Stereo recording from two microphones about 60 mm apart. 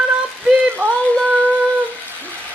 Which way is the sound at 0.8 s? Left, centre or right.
Right.